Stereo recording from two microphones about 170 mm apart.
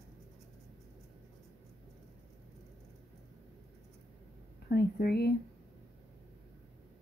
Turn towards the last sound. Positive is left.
turn(degrees=70)  # may be behind; listen again after turning